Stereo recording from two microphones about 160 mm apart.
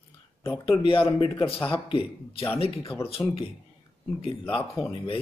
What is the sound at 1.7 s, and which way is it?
Speech, 35° left (ahead or behind).